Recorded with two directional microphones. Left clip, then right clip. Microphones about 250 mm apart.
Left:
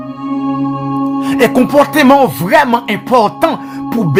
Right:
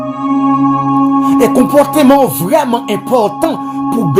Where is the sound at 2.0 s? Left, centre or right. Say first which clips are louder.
Even; left.